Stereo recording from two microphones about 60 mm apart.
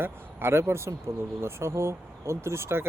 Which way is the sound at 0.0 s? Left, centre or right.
Right.